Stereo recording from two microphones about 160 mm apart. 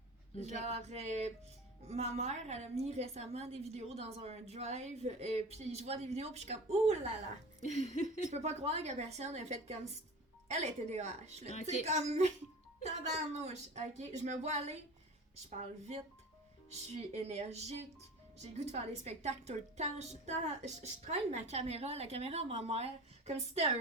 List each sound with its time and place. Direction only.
0.4 s a woman's voice: 45° right (ahead or behind)
7.6 s a sound: 45° left (ahead or behind)
8.3 s a woman's voice: 45° right (ahead or behind)
16.6 s a woman's voice: 40° right (ahead or behind)